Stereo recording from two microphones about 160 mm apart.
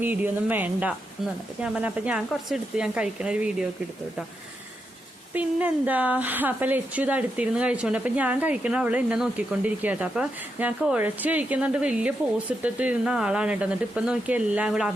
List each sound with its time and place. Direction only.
0.0 s a woman's voice: 10° right (ahead or behind)
5.3 s a woman's voice: 10° right (ahead or behind)